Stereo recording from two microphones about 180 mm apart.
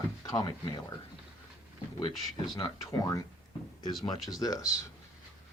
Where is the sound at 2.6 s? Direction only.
25° left (ahead or behind).